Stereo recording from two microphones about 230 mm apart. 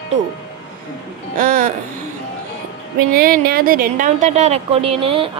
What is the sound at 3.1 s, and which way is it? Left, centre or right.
A woman's voice, right.